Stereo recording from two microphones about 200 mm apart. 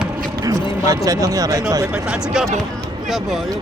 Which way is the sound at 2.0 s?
5° right (ahead or behind).